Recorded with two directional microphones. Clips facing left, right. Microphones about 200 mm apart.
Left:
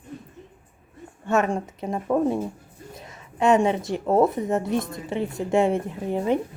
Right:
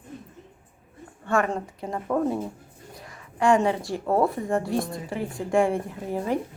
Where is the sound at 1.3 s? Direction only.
20° left (ahead or behind).